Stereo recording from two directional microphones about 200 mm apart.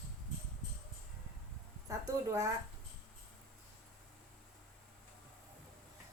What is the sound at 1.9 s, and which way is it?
Speech, 15° right (ahead or behind).